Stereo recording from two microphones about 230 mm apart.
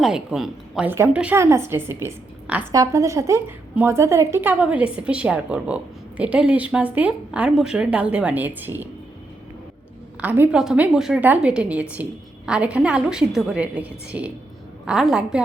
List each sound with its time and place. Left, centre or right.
0.0 s a woman's voice: centre
10.2 s a woman's voice: centre